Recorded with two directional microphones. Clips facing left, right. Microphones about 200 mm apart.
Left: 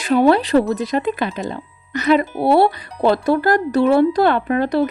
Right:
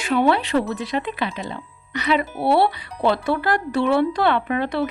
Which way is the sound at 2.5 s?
45° left (ahead or behind).